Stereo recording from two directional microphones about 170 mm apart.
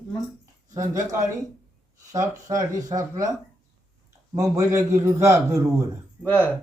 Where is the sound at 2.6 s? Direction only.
20° right (ahead or behind).